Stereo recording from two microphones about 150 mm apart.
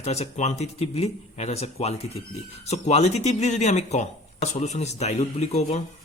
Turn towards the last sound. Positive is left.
turn(degrees=45)  # may be behind; listen again after turning